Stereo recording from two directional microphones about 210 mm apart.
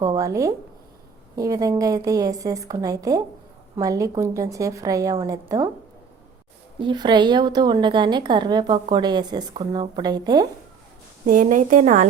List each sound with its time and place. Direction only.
0.0 s a woman's voice: 15° right (ahead or behind)
6.7 s a woman's voice: 20° right (ahead or behind)
11.3 s a woman's voice: 40° right (ahead or behind)